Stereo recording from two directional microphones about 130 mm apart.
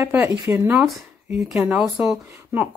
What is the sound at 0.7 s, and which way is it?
Speech, centre (ahead or behind).